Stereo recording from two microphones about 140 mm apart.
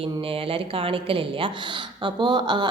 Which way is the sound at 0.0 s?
40° right (ahead or behind).